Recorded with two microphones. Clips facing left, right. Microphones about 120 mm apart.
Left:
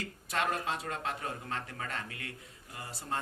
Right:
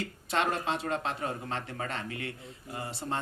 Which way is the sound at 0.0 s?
25° right (ahead or behind).